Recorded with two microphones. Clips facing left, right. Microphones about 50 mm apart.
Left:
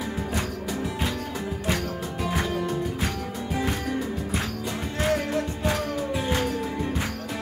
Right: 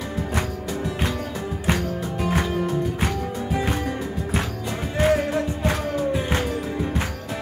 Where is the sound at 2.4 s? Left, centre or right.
Centre.